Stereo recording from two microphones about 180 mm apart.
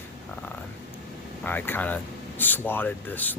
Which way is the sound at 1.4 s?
10° left (ahead or behind).